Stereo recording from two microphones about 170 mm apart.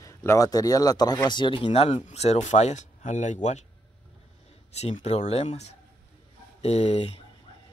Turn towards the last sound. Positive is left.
turn(degrees=40)  # may be behind; listen again after turning